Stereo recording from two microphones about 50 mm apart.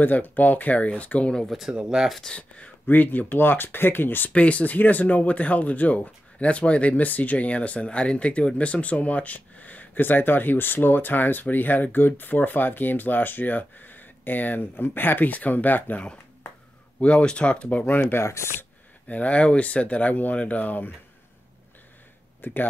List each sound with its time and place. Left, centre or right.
0.0 s speech: left
1.5 s speech: centre
1.8 s speech: centre
2.2 s speech: left
2.9 s speech: left
4.3 s speech: left
17.0 s speech: left
17.8 s speech: left
18.2 s speech: left
19.0 s speech: left
22.4 s speech: left